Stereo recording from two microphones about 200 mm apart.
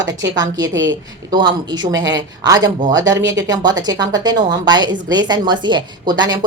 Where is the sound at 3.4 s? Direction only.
20° right (ahead or behind).